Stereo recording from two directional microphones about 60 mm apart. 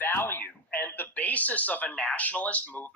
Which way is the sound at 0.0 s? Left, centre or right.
Left.